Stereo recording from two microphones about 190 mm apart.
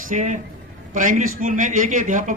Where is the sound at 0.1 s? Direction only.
40° right (ahead or behind).